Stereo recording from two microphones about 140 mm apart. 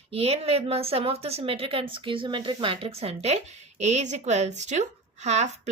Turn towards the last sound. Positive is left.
turn(degrees=-55)  # may be behind; listen again after turning